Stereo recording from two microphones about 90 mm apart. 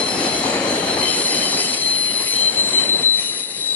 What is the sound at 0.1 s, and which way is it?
Train wheels squealing, 15° left (ahead or behind).